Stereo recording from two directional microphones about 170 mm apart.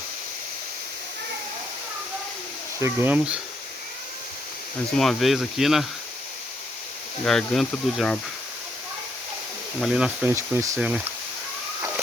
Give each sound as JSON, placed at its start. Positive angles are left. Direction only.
{"t": 2.8, "sound": "speech", "side_deg": -10}
{"t": 4.9, "sound": "speech", "side_deg": 0}
{"t": 7.3, "sound": "speech", "side_deg": 0}
{"t": 9.8, "sound": "speech", "side_deg": -5}
{"t": 10.8, "sound": "speech", "side_deg": -5}